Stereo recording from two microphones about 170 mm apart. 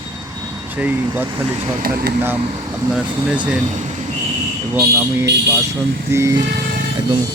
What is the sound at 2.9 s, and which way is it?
Speech, 5° right (ahead or behind).